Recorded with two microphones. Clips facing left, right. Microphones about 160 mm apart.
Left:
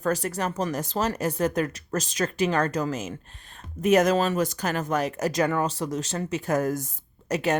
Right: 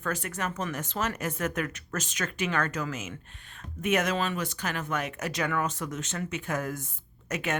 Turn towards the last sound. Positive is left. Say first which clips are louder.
# left 7 dB
turn(degrees=35)  # may be behind; listen again after turning